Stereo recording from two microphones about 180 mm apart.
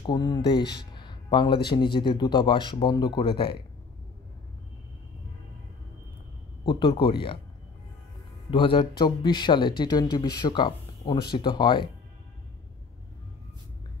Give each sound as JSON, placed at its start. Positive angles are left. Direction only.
{"t": 0.0, "sound": "speech", "side_deg": 25}
{"t": 6.6, "sound": "speech", "side_deg": 30}
{"t": 8.5, "sound": "speech", "side_deg": 30}